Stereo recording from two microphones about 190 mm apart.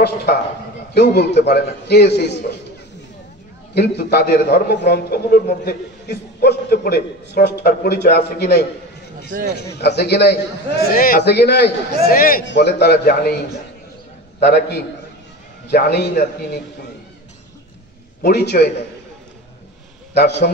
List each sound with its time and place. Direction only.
0.9 s a man's voice: 60° left (ahead or behind)
3.7 s a man's voice: 60° left (ahead or behind)
9.8 s a man's voice: 60° left (ahead or behind)
12.4 s a man's voice: 65° left (ahead or behind)
14.4 s a man's voice: 60° left (ahead or behind)
18.2 s a man's voice: 60° left (ahead or behind)
20.2 s a man's voice: 60° left (ahead or behind)